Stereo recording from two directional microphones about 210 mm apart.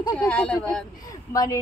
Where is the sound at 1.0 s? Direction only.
15° left (ahead or behind).